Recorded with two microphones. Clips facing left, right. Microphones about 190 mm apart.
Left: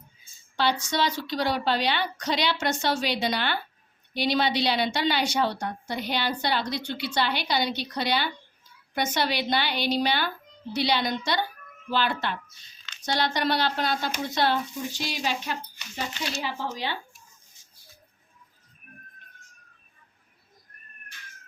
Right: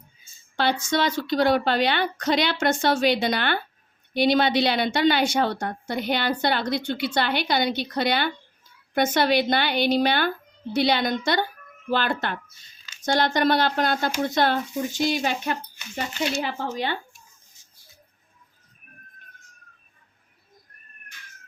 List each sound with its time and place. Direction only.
0.5 s a woman's voice: 55° right (ahead or behind)